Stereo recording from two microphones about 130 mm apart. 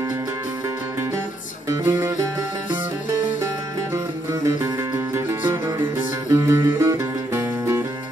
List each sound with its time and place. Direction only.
1.7 s music: 25° right (ahead or behind)
3.9 s music: 25° right (ahead or behind)